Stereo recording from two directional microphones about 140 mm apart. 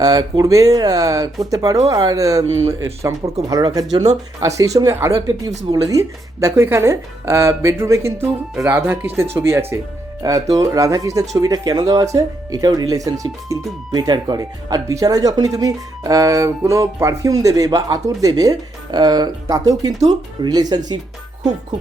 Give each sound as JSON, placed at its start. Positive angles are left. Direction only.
{"t": 0.0, "sound": "speech", "side_deg": -30}